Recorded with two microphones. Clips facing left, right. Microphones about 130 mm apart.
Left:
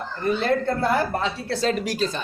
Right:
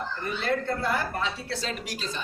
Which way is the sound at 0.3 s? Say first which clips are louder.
Left 7 dB; 35° left (ahead or behind).